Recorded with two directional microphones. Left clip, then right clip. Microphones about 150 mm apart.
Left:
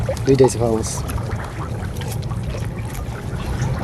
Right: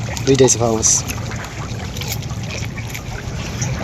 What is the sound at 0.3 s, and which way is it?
Speech, centre (ahead or behind).